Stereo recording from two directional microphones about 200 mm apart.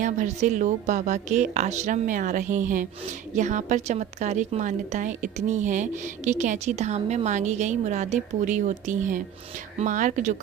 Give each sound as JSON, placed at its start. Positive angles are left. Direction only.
{"t": 0.0, "sound": "a woman's voice", "side_deg": -35}